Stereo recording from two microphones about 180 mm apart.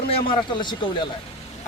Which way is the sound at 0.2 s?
25° left (ahead or behind).